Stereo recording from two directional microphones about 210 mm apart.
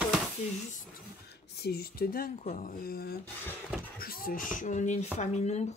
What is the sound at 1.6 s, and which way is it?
Speech, 50° left (ahead or behind).